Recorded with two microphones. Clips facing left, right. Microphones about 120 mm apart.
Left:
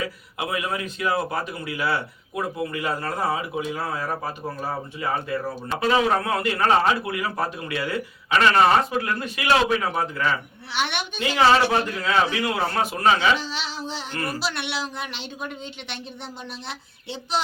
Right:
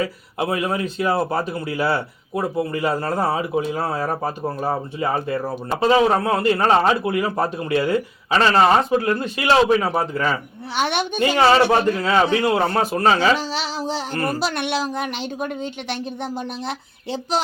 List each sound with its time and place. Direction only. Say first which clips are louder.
0.0 s a man's voice: right 6 dB; 35° right (ahead or behind)
11.7 s a man's voice: right 5 dB; 35° right (ahead or behind)